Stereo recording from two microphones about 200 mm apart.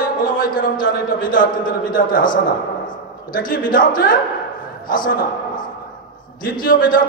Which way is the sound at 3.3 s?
45° left (ahead or behind).